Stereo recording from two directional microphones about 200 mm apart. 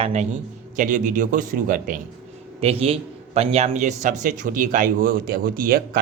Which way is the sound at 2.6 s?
30° right (ahead or behind).